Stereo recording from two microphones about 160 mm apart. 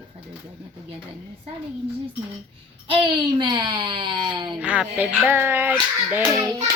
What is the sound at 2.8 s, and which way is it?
A child's voice, 30° right (ahead or behind).